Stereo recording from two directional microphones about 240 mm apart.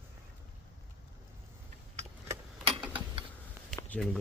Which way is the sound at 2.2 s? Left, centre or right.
Right.